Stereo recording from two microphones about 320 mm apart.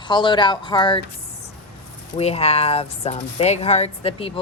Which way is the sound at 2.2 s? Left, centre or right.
Centre.